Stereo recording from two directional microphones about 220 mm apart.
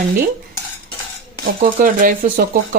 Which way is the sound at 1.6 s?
40° right (ahead or behind).